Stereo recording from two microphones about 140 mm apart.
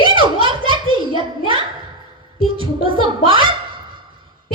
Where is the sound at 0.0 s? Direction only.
35° right (ahead or behind).